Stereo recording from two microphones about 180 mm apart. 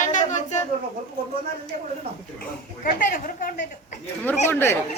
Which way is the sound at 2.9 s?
50° left (ahead or behind).